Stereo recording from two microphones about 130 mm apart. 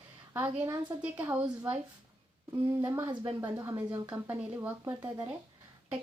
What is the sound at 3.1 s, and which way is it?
Speech, 35° right (ahead or behind).